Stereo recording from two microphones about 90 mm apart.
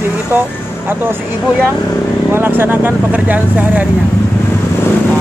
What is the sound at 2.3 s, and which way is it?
Speech, 25° right (ahead or behind).